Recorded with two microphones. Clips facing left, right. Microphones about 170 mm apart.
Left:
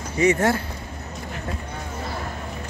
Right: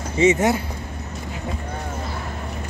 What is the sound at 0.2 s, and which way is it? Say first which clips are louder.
Speech: right 2 dB; 20° right (ahead or behind).